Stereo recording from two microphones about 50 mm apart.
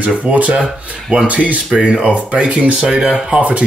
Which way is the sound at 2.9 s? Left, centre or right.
Centre.